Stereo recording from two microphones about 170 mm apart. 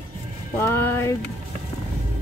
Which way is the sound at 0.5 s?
15° left (ahead or behind).